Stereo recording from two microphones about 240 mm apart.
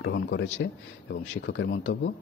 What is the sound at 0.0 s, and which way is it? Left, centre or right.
A man's voice, left.